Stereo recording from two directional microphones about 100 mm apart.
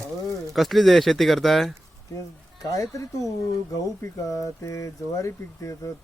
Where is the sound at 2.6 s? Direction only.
35° left (ahead or behind).